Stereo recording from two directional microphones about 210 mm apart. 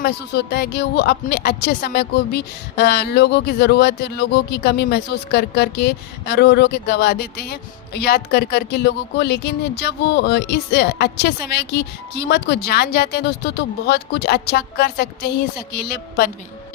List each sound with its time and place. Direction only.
0.0 s a woman's voice: 50° left (ahead or behind)